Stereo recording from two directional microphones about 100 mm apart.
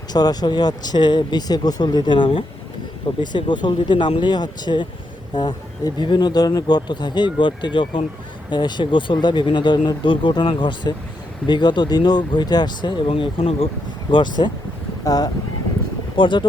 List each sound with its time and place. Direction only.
0.1 s speech: 40° left (ahead or behind); by 13.7 s 70° left (ahead or behind)
14.1 s speech: 50° left (ahead or behind)
15.0 s speech: 40° left (ahead or behind)
16.1 s speech: 55° left (ahead or behind)